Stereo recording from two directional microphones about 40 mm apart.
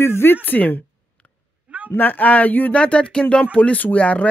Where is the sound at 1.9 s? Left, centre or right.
Left.